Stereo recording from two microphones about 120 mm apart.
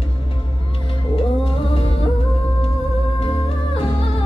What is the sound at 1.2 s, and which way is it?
Music, 50° left (ahead or behind).